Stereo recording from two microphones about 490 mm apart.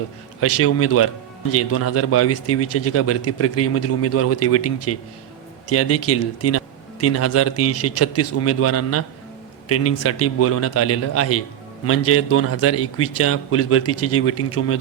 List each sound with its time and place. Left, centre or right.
0.3 s speech: left